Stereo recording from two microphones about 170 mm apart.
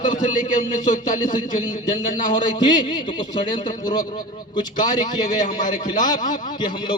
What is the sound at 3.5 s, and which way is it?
A man's voice, 25° left (ahead or behind).